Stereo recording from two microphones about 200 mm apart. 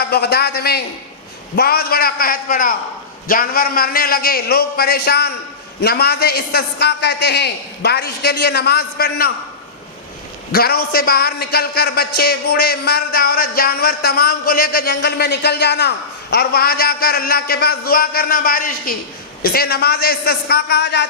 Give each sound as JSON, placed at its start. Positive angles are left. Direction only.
{"t": 0.0, "sound": "a man's voice", "side_deg": 55}
{"t": 10.5, "sound": "a man's voice", "side_deg": 50}